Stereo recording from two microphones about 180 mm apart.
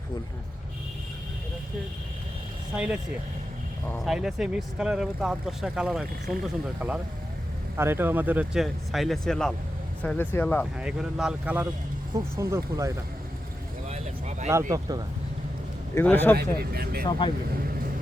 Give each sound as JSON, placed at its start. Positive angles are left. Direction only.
{"t": 2.7, "sound": "speech", "side_deg": -5}
{"t": 4.0, "sound": "speech", "side_deg": 0}
{"t": 10.8, "sound": "speech", "side_deg": -5}
{"t": 13.8, "sound": "a sound", "side_deg": -40}
{"t": 14.7, "sound": "speech", "side_deg": -20}
{"t": 16.0, "sound": "speech", "side_deg": 10}
{"t": 16.4, "sound": "speech", "side_deg": -60}
{"t": 17.1, "sound": "speech", "side_deg": 25}